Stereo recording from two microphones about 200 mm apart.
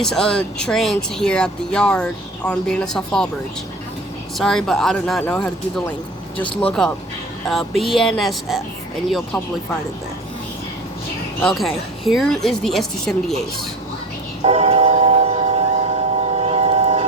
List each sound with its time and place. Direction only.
0.0 s speech: 5° left (ahead or behind)
4.4 s speech: centre (ahead or behind)
11.3 s speech: centre (ahead or behind)
14.4 s a sound: 30° right (ahead or behind)